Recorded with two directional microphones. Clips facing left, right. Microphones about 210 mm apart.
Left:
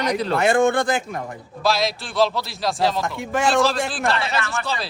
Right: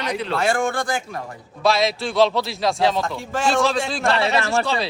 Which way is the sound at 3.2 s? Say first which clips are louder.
Left 3 dB; 20° left (ahead or behind).